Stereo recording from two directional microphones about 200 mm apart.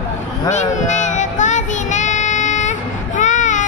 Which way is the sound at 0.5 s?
35° left (ahead or behind).